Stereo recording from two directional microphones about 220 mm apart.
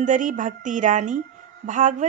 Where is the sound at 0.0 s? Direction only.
35° right (ahead or behind).